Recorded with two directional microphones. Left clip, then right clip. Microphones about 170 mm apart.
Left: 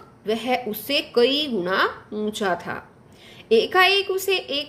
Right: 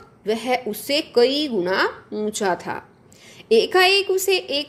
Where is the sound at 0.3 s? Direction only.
25° right (ahead or behind).